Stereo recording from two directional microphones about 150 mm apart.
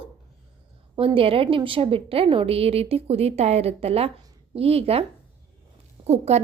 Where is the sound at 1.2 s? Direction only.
35° right (ahead or behind).